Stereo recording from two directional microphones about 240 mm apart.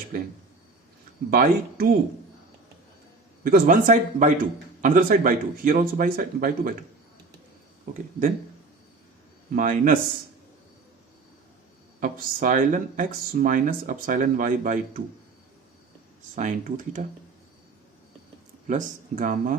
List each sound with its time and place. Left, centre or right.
0.1 s speech: right
1.3 s speech: right
3.4 s speech: right
7.9 s speech: right
9.6 s speech: right
11.9 s speech: right
16.3 s speech: right
18.7 s speech: right